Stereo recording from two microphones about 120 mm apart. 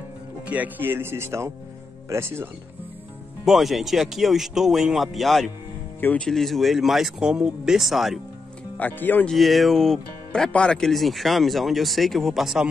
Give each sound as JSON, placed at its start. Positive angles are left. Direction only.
{"t": 0.5, "sound": "speech", "side_deg": -15}
{"t": 3.4, "sound": "speech", "side_deg": 0}
{"t": 5.9, "sound": "speech", "side_deg": 15}
{"t": 6.2, "sound": "speech", "side_deg": 0}
{"t": 8.7, "sound": "speech", "side_deg": 15}
{"t": 9.3, "sound": "speech", "side_deg": 0}